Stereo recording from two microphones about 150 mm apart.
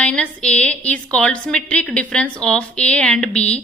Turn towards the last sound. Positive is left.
turn(degrees=5)  # may be behind; listen again after turning